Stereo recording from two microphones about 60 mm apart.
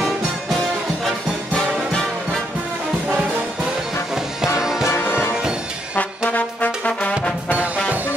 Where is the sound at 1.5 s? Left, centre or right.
Centre.